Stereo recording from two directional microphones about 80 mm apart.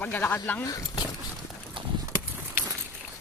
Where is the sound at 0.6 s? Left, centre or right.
Left.